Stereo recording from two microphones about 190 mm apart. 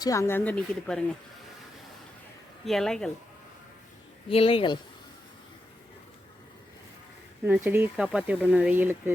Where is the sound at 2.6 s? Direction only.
Centre (ahead or behind).